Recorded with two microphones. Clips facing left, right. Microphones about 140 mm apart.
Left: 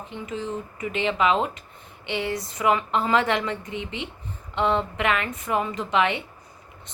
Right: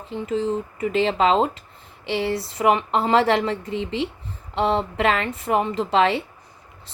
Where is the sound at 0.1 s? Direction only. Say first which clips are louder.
Right 8 dB; 30° right (ahead or behind).